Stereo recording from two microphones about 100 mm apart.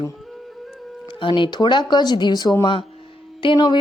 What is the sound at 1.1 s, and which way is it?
Speech, 55° left (ahead or behind).